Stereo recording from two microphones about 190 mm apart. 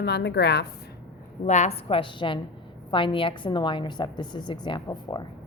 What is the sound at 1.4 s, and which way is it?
A woman's voice, 40° left (ahead or behind).